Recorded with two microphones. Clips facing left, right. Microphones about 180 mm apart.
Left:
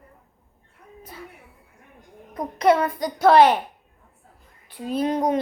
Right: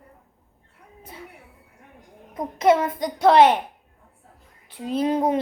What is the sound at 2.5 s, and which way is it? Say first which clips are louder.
A woman's voice: even; 25° right (ahead or behind).